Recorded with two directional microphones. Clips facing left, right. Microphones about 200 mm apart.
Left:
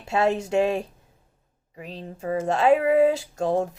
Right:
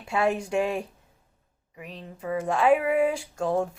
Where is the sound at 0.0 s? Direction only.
25° left (ahead or behind).